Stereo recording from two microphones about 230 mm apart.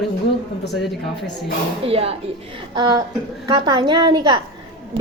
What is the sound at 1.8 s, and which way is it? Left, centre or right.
Speech, right.